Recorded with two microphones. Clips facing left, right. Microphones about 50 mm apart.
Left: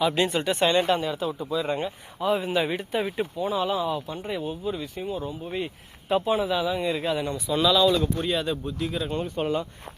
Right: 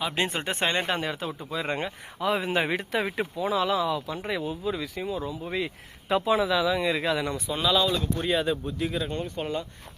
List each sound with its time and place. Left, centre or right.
0.2 s speech: right
1.0 s speech: right
2.5 s speech: right
7.5 s speech: centre
9.1 s speech: centre